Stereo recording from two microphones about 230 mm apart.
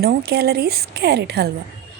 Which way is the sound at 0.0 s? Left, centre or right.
Right.